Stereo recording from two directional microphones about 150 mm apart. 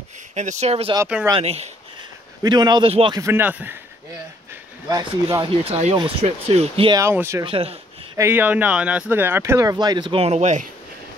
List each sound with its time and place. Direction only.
0.3 s speech: 50° right (ahead or behind)
2.4 s speech: 30° right (ahead or behind)
3.2 s speech: 15° right (ahead or behind)
4.8 s speech: 25° right (ahead or behind)
5.4 s speech: 40° right (ahead or behind)
6.9 s speech: 20° right (ahead or behind)
7.4 s speech: 40° right (ahead or behind)
8.2 s speech: 10° right (ahead or behind); by 10.7 s 55° right (ahead or behind)